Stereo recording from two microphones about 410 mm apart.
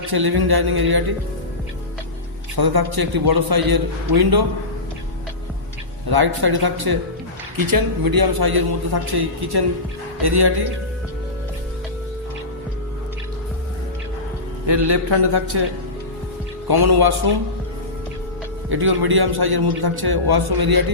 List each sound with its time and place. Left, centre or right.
0.1 s a man's voice: right
2.6 s a man's voice: right
6.1 s a man's voice: right
15.1 s speech: right
16.6 s a man's voice: right
18.7 s a man's voice: right